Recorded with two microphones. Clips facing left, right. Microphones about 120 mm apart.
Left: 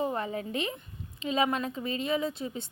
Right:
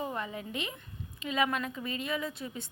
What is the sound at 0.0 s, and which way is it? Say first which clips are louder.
A woman's voice: left 5 dB; 35° left (ahead or behind).